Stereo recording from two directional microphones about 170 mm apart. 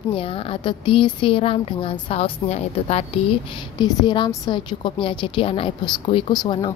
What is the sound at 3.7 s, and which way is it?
A woman's voice, 25° left (ahead or behind).